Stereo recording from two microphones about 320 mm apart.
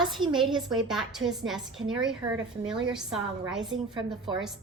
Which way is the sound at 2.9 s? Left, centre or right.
Centre.